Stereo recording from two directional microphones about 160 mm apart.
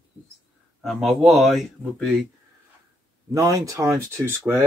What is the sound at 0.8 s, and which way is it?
Speech, centre (ahead or behind).